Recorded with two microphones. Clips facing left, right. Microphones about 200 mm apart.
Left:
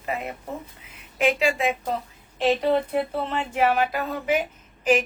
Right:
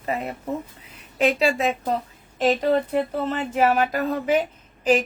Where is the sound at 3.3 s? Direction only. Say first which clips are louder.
Right 2 dB; 40° right (ahead or behind).